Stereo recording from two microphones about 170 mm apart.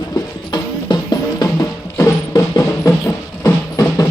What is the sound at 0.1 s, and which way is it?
Music, 25° left (ahead or behind).